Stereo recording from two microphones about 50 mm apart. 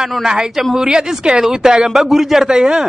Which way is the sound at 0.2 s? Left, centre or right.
Centre.